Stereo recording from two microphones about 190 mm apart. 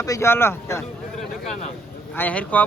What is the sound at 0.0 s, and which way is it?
Speech, 15° left (ahead or behind).